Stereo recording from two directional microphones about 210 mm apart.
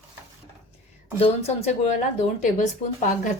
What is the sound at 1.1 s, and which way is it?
Speech, 30° left (ahead or behind).